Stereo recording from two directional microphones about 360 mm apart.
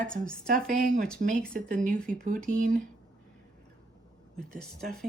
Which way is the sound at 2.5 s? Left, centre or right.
Right.